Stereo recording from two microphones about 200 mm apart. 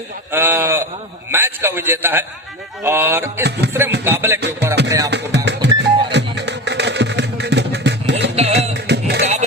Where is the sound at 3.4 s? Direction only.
55° right (ahead or behind).